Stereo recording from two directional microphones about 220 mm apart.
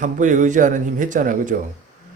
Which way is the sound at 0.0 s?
35° right (ahead or behind).